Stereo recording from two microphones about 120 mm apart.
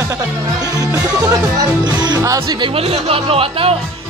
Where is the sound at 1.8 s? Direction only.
35° right (ahead or behind).